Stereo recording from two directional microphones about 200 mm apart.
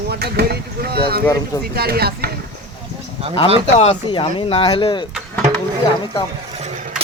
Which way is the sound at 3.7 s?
30° left (ahead or behind).